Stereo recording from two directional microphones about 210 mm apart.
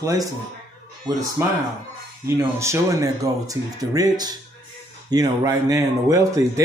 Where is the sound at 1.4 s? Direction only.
15° right (ahead or behind).